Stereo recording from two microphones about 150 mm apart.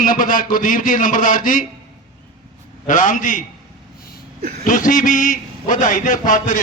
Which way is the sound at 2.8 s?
60° left (ahead or behind).